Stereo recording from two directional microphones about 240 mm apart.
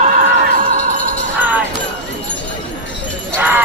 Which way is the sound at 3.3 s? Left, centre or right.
Centre.